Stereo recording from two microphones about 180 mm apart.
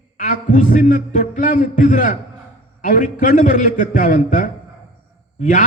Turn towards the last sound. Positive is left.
turn(degrees=45)  # may be behind; listen again after turning